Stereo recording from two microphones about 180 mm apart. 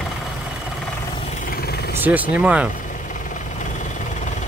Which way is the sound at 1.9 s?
10° right (ahead or behind).